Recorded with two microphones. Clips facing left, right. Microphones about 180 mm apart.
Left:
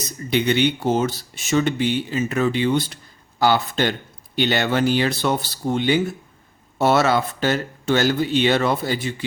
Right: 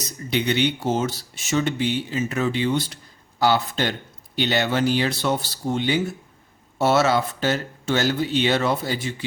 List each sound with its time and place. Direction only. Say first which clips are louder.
0.3 s speech: left 3 dB; 55° left (ahead or behind)